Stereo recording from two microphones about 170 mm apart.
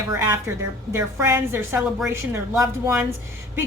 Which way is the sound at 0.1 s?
15° right (ahead or behind).